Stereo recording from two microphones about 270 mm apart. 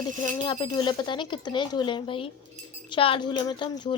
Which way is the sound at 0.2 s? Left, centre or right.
Centre.